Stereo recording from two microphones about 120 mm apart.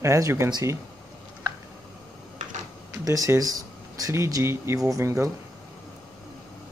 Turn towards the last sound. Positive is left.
turn(degrees=-25)  # may be behind; listen again after turning